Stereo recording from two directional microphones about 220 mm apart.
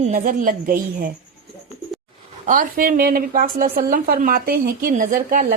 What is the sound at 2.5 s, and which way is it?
A woman's voice, 40° right (ahead or behind).